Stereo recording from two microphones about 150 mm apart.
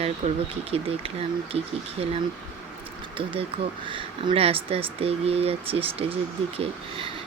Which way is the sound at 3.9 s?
35° right (ahead or behind).